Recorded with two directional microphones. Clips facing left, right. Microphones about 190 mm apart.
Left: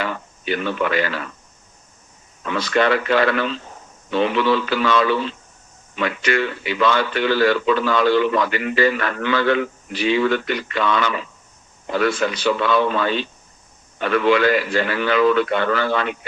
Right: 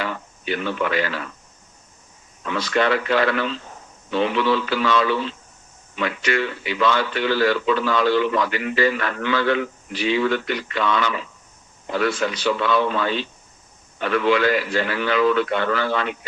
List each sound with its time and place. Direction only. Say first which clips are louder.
0.0 s speech: left 2 dB; 60° left (ahead or behind)
2.5 s speech: left 2 dB; 60° left (ahead or behind)